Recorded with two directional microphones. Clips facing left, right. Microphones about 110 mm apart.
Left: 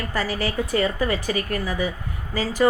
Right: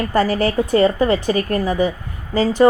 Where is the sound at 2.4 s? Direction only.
25° right (ahead or behind).